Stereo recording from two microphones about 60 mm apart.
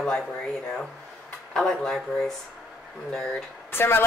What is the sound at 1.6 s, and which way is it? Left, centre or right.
Speech, centre.